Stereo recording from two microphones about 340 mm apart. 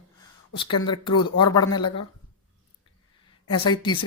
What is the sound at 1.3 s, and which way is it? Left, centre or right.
Speech, centre.